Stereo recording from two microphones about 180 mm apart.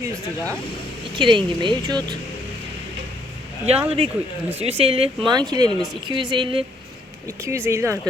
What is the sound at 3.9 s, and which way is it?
Speech, 35° right (ahead or behind).